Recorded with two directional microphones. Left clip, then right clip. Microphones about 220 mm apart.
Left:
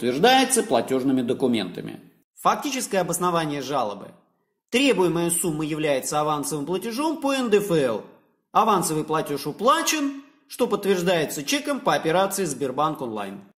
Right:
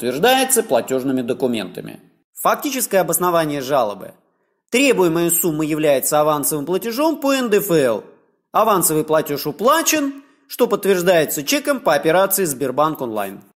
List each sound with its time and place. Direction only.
0.0 s speech: 30° right (ahead or behind)